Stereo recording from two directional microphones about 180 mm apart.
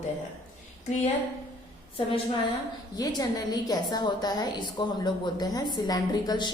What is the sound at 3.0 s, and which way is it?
A woman's voice, 20° left (ahead or behind).